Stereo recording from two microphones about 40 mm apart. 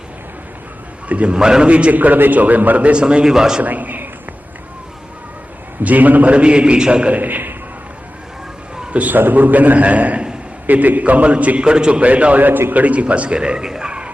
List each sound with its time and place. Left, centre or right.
1.0 s a man's voice: right
1.3 s a man's voice: right
1.9 s a man's voice: right
2.9 s a man's voice: right
3.3 s a man's voice: centre
3.6 s a man's voice: right
5.8 s a man's voice: right
6.3 s a man's voice: right
7.1 s a man's voice: right
9.1 s a man's voice: right
11.6 s a man's voice: right
12.5 s a man's voice: right
12.7 s a man's voice: right; by 13.9 s centre